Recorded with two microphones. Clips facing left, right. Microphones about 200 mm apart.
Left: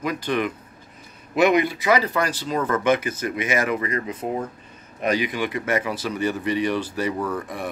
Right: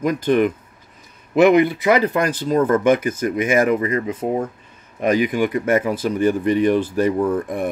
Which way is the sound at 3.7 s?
25° right (ahead or behind).